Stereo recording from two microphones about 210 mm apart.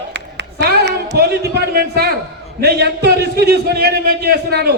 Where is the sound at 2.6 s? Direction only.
50° right (ahead or behind).